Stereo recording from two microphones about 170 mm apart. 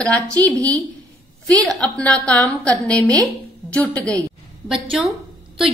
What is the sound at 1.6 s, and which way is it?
A woman's voice, 5° left (ahead or behind).